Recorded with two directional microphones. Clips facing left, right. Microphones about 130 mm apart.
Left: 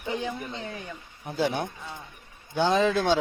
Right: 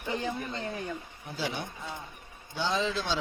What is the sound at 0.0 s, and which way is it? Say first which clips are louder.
Speech: left 2 dB; centre (ahead or behind).